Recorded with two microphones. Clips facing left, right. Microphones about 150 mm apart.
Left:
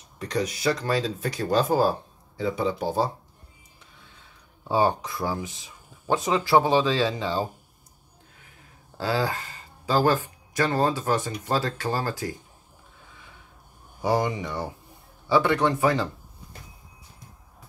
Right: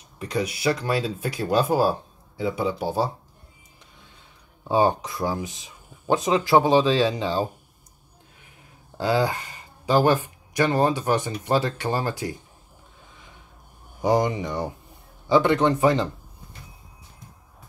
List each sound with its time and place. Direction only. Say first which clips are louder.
0.2 s speech: right 1 dB; 10° right (ahead or behind)
4.6 s speech: right 2 dB; 20° right (ahead or behind)
8.9 s speech: right 4 dB; 20° right (ahead or behind)
14.0 s speech: right 3 dB; 20° right (ahead or behind)